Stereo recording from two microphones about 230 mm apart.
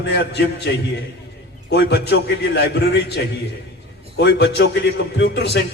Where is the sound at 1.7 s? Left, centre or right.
Left.